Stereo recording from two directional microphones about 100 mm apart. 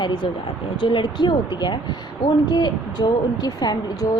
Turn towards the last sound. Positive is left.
turn(degrees=40)  # may be behind; listen again after turning